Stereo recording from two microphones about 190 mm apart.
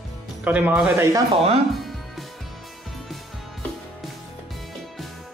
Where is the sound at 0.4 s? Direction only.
5° right (ahead or behind).